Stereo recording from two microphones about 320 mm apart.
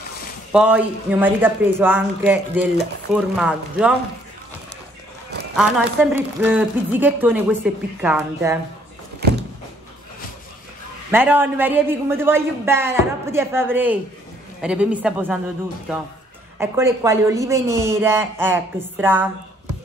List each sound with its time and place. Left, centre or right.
0.5 s a woman's voice: centre
5.6 s a woman's voice: centre
9.2 s vehicle: right
11.1 s a woman's voice: centre
16.5 s a woman's voice: centre